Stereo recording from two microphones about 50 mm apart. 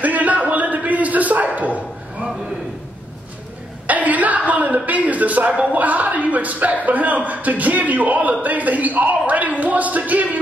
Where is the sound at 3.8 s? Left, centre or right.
Right.